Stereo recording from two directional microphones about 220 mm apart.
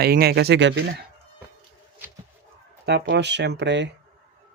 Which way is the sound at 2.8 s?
50° right (ahead or behind).